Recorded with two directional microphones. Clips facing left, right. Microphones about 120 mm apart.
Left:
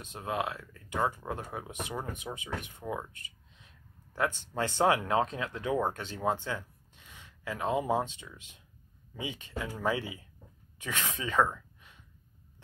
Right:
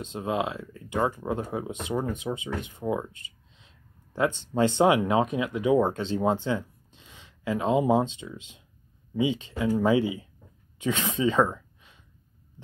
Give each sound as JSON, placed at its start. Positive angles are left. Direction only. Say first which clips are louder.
{"t": 0.0, "sound": "speech", "louder": "right 5 dB", "side_deg": -20}